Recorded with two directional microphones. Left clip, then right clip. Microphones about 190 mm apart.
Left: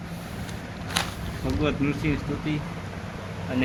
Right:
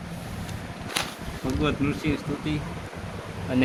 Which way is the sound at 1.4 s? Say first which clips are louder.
Even; 15° right (ahead or behind).